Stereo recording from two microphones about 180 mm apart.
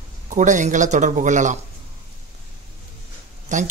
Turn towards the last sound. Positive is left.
turn(degrees=-45)  # may be behind; listen again after turning